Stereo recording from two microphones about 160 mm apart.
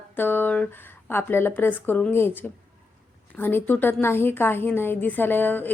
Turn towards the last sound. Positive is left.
turn(degrees=10)  # may be behind; listen again after turning